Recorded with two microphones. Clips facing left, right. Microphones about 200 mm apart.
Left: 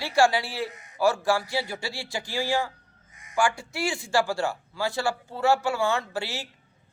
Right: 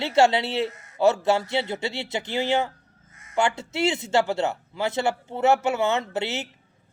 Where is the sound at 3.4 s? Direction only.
25° right (ahead or behind).